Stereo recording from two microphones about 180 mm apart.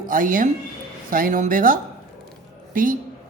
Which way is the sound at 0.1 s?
50° right (ahead or behind).